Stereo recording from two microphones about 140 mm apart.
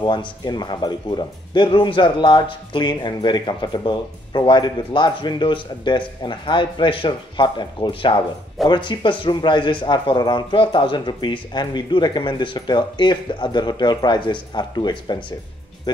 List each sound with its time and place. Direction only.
0.0 s speech: 35° left (ahead or behind)